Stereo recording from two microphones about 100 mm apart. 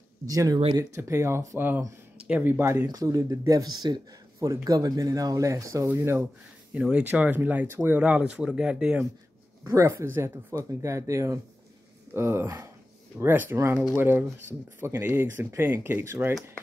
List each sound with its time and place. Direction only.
0.3 s speech: 35° right (ahead or behind)
2.2 s speech: 15° right (ahead or behind)
2.6 s speech: 25° right (ahead or behind)
2.9 s speech: 35° right (ahead or behind)
6.7 s speech: 10° right (ahead or behind)
9.7 s speech: 30° right (ahead or behind)